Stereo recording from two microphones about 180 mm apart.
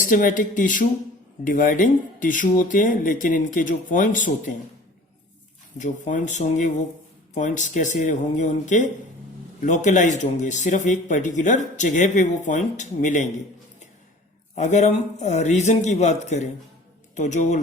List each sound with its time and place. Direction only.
0.0 s speech: 45° left (ahead or behind)
5.7 s speech: 45° left (ahead or behind)
14.5 s a man's voice: 40° left (ahead or behind)